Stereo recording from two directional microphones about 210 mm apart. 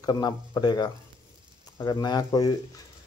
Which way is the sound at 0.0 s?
20° left (ahead or behind).